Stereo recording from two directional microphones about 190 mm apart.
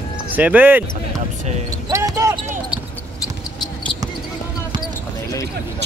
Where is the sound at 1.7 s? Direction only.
20° right (ahead or behind).